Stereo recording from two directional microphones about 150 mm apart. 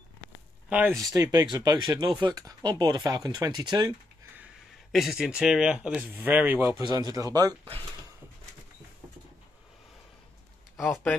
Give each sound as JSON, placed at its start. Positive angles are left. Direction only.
{"t": 0.7, "sound": "speech", "side_deg": -10}
{"t": 1.1, "sound": "speech", "side_deg": -25}
{"t": 4.9, "sound": "speech", "side_deg": 0}
{"t": 6.8, "sound": "speech", "side_deg": -30}
{"t": 10.8, "sound": "speech", "side_deg": 15}